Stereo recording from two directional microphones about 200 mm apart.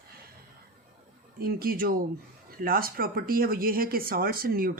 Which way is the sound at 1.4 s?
45° right (ahead or behind).